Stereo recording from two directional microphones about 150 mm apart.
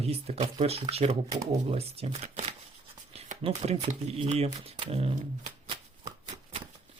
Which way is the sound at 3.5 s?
45° right (ahead or behind).